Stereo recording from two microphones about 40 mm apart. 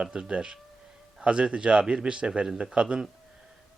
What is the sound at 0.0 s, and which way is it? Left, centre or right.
A man's voice, right.